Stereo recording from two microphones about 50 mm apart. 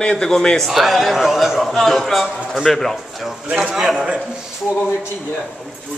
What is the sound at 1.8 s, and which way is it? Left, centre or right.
A man's voice, centre.